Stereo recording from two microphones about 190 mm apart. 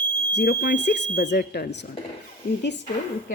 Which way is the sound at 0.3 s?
55° left (ahead or behind).